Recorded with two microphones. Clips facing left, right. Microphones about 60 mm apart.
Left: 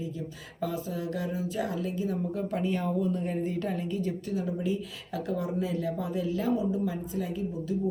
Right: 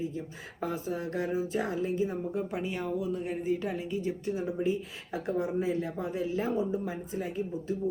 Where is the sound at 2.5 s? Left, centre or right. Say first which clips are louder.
Left 3 dB; centre.